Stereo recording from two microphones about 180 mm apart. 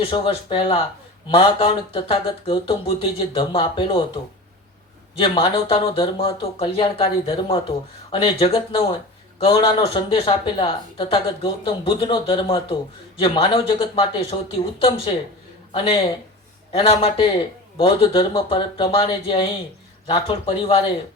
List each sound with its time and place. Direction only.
0.0 s speech: 30° left (ahead or behind)
5.2 s speech: 30° left (ahead or behind)
15.7 s speech: 30° left (ahead or behind)